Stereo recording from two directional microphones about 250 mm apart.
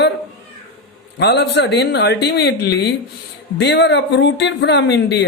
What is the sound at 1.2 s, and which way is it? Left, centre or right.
A woman's voice, left.